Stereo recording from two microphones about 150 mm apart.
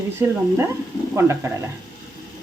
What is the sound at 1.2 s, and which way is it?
Speech, 20° right (ahead or behind).